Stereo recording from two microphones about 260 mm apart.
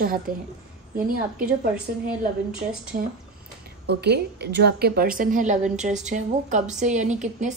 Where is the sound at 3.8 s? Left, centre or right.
Right.